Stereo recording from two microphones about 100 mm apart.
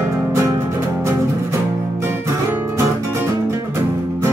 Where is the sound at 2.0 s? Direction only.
25° right (ahead or behind).